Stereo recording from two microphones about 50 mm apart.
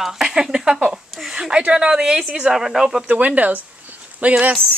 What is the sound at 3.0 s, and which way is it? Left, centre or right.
Speech, right.